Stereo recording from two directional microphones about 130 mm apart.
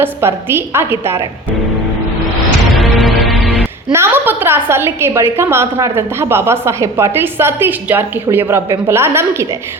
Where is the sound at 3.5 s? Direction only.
15° right (ahead or behind).